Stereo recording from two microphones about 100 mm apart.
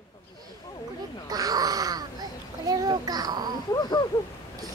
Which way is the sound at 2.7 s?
40° right (ahead or behind).